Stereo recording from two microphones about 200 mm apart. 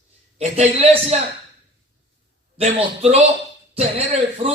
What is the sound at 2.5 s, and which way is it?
Speech, 35° right (ahead or behind).